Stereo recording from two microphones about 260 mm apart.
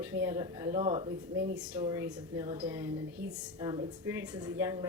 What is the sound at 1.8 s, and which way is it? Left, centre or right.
Speech, centre.